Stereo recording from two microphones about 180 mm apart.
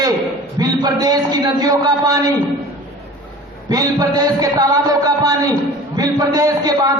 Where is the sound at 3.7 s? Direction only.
20° right (ahead or behind).